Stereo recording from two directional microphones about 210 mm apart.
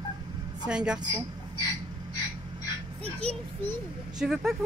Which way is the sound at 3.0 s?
30° right (ahead or behind).